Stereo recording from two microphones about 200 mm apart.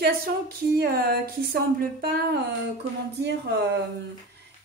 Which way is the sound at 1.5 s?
50° right (ahead or behind).